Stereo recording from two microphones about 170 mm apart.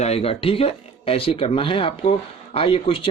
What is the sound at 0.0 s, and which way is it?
Speech, 35° left (ahead or behind).